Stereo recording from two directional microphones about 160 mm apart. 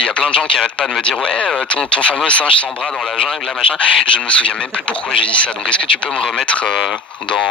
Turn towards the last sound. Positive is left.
turn(degrees=5)  # may be behind; listen again after turning